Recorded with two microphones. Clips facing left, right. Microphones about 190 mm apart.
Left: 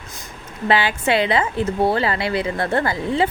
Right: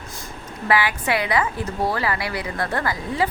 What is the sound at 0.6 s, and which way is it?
A woman's voice, 25° left (ahead or behind).